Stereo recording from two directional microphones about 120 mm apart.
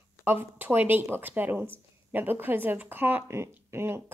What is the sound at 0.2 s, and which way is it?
Speech, 20° right (ahead or behind).